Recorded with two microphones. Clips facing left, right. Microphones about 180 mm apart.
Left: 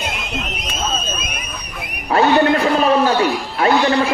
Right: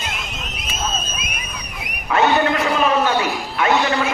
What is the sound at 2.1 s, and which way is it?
A man's voice, 35° left (ahead or behind).